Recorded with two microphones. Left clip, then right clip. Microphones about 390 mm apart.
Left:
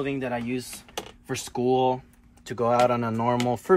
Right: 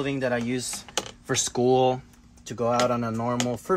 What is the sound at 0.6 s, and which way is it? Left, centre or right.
Typing, right.